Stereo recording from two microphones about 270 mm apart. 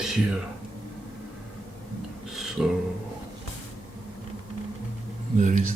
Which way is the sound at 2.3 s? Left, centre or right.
Centre.